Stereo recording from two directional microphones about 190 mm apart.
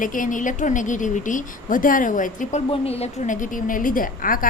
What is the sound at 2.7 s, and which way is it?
A woman's voice, 30° left (ahead or behind).